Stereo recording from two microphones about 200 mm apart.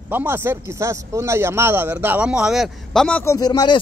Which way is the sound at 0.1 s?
10° right (ahead or behind).